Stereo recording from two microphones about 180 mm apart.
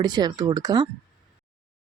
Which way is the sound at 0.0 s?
25° right (ahead or behind).